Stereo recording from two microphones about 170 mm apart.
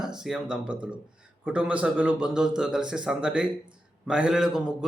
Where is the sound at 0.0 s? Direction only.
5° right (ahead or behind).